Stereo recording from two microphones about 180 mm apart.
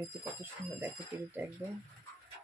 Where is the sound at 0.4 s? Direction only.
10° right (ahead or behind).